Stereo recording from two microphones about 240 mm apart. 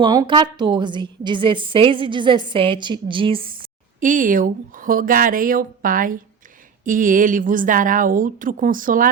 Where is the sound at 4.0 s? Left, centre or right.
Right.